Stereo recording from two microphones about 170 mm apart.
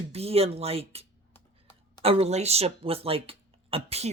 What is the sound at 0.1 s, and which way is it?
Speech, 35° right (ahead or behind).